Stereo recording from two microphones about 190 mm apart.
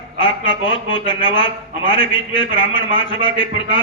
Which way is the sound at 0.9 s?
25° left (ahead or behind).